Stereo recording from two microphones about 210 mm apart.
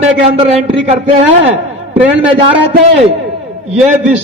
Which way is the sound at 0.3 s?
30° right (ahead or behind).